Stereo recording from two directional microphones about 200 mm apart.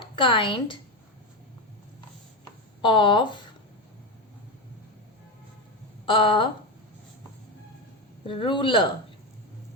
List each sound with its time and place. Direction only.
0.2 s speech: 25° left (ahead or behind)
2.8 s speech: 25° left (ahead or behind)
6.1 s speech: 25° left (ahead or behind)
8.3 s speech: 25° left (ahead or behind)